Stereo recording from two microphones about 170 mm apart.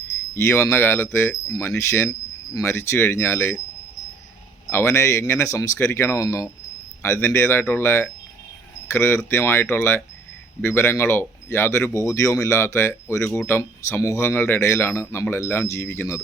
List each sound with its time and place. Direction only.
0.3 s speech: 15° left (ahead or behind)
4.7 s speech: 15° left (ahead or behind)